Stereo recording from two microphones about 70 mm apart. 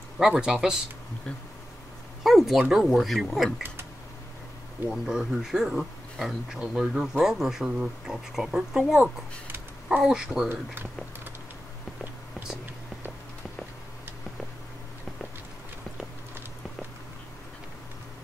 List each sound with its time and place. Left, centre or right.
0.2 s speech: centre
2.2 s speech: centre
4.8 s speech: centre
10.5 s speech: right